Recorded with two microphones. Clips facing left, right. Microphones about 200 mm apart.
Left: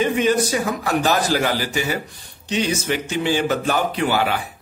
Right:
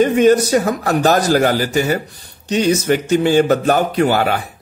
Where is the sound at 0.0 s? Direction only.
45° right (ahead or behind).